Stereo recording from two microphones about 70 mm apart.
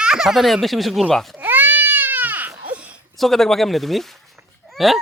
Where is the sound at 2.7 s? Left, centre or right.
Centre.